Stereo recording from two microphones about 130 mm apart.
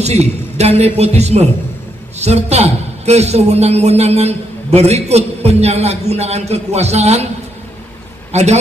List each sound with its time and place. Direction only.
0.0 s a man's voice: 55° right (ahead or behind)
8.3 s a man's voice: 60° right (ahead or behind)